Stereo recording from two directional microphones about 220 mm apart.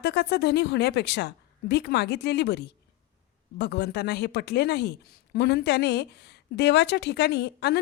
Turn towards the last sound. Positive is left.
turn(degrees=50)  # may be behind; listen again after turning